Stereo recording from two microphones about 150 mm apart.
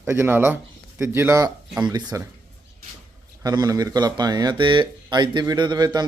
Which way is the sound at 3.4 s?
25° right (ahead or behind).